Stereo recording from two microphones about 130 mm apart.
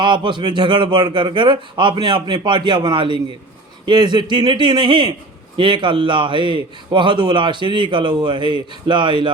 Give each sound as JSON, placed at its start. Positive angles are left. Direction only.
{"t": 0.0, "sound": "a man's voice", "side_deg": -40}